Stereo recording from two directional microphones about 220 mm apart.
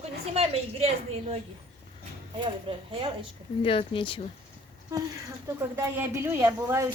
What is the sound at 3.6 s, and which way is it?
Speech, 25° left (ahead or behind).